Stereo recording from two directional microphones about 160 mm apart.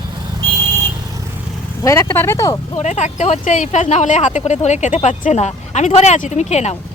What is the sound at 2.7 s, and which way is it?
Speech, 45° left (ahead or behind).